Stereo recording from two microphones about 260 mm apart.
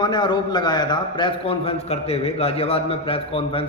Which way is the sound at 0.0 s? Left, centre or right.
Centre.